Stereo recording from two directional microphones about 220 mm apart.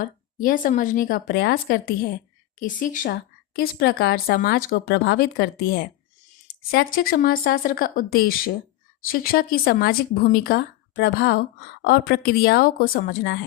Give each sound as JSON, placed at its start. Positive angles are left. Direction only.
{"t": 0.0, "sound": "a woman's voice", "side_deg": 40}